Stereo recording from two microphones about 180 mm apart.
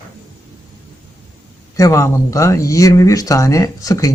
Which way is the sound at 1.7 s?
15° left (ahead or behind).